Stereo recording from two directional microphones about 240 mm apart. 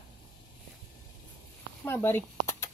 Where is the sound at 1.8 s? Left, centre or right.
Centre.